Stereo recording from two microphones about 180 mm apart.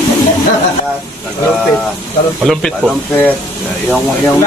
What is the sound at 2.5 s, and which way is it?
Speech, centre (ahead or behind).